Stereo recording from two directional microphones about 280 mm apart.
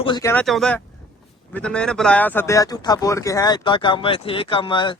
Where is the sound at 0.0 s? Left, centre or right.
Centre.